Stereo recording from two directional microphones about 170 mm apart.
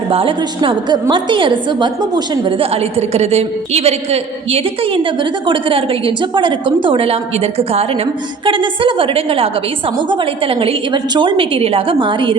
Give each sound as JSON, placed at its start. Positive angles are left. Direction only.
{"t": 0.1, "sound": "a woman's voice", "side_deg": -30}